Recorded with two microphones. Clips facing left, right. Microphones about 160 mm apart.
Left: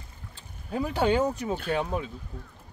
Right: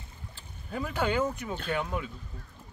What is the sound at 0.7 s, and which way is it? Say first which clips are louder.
Speech: left 5 dB; 15° left (ahead or behind).